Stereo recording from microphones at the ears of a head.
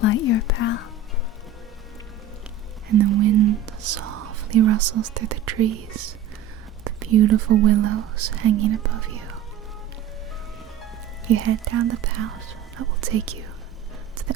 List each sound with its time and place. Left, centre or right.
0.0 s speech: left
2.9 s whispering: right
6.8 s speech: right
11.3 s speech: right